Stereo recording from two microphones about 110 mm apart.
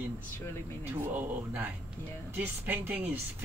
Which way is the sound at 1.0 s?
15° right (ahead or behind).